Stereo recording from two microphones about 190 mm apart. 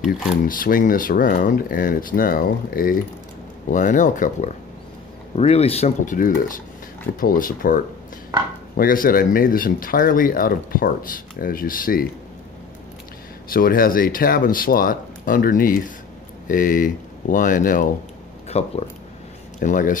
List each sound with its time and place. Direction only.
0.4 s speech: 45° left (ahead or behind)
5.3 s speech: 30° left (ahead or behind); by 12.1 s 50° left (ahead or behind)
13.5 s speech: 50° left (ahead or behind)